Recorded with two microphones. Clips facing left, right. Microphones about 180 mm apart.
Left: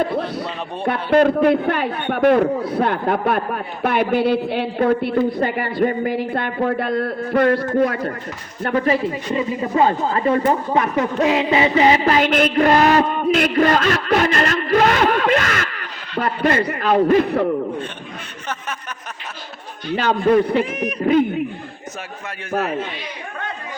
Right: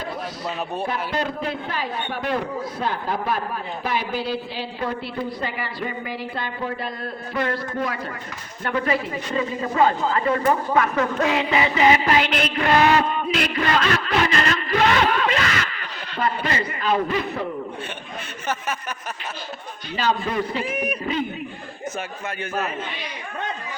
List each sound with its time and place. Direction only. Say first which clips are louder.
0.0 s a sound: left 10 dB; 60° left (ahead or behind)
1.1 s a man's voice: left 12 dB; 60° left (ahead or behind)
8.9 s speech: left 5 dB; 25° left (ahead or behind); by 17.4 s 50° left (ahead or behind)
20.0 s a man's voice: left 7 dB; 55° left (ahead or behind)
20.7 s speech: left 2 dB; 10° right (ahead or behind)
21.0 s a man's voice: left 10 dB; 55° left (ahead or behind)